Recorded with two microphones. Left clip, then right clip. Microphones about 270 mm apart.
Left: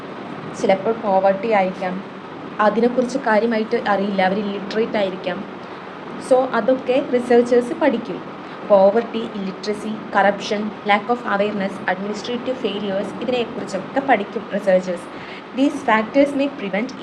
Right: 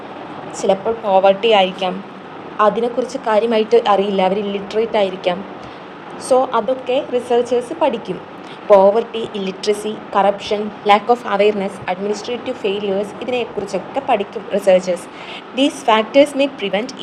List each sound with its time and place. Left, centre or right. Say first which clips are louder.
0.6 s a woman's voice: right 1 dB; right